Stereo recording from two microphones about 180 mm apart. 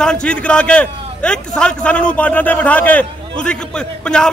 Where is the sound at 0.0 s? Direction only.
5° left (ahead or behind).